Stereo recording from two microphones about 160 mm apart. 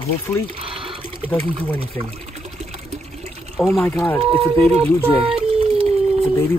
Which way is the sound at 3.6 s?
Centre (ahead or behind).